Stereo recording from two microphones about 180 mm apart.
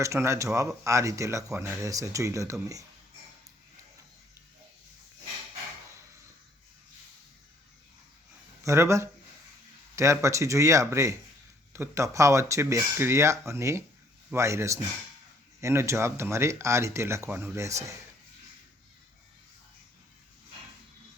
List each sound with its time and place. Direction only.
0.0 s speech: 15° right (ahead or behind)
8.6 s speech: 15° right (ahead or behind)